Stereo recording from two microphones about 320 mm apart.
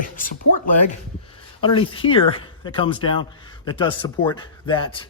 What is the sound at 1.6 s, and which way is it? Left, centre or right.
Speech, centre.